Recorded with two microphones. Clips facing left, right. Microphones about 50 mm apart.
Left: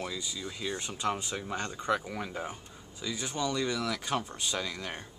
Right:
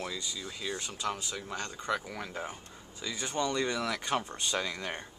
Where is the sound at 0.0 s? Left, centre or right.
Centre.